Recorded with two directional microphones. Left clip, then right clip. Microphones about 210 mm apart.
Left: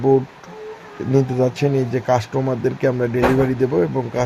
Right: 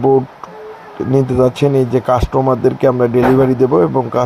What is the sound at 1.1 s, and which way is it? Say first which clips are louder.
A man's voice: right 5 dB; 15° right (ahead or behind).